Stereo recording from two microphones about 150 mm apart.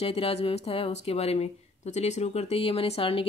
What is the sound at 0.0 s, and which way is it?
Speech, 40° left (ahead or behind).